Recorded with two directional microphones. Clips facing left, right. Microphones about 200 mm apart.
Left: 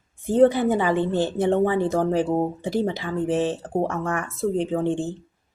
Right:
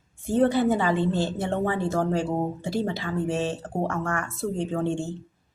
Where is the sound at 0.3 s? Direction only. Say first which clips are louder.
Left 4 dB; 15° left (ahead or behind).